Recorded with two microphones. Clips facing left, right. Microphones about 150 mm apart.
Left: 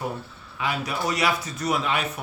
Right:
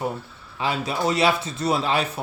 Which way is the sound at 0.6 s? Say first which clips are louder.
Right 3 dB; 30° right (ahead or behind).